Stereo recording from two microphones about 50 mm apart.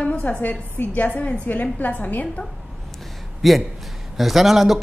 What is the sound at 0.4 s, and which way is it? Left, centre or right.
A woman's voice, left.